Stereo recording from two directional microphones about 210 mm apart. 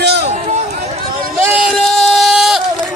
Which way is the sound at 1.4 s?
5° right (ahead or behind).